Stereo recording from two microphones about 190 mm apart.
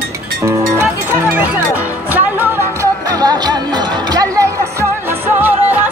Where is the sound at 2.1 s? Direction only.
10° right (ahead or behind).